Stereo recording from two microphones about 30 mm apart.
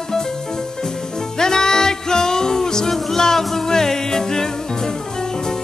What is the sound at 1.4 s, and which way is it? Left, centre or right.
Music, left.